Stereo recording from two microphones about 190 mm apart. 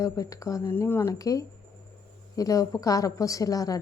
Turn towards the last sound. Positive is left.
turn(degrees=20)  # may be behind; listen again after turning